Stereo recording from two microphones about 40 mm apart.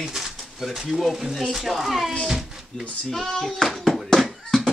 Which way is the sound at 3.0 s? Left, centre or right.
Centre.